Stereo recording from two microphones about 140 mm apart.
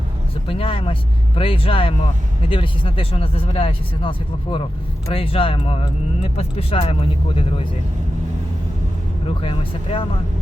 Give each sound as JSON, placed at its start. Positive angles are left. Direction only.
{"t": 0.4, "sound": "speech", "side_deg": 40}
{"t": 5.1, "sound": "speech", "side_deg": 40}
{"t": 9.4, "sound": "speech", "side_deg": 40}